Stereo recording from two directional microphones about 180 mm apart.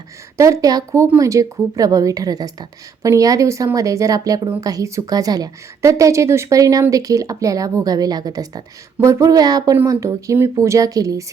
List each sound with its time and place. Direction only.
0.3 s a woman's voice: 15° right (ahead or behind)